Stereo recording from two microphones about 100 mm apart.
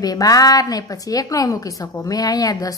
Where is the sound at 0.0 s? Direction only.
40° left (ahead or behind).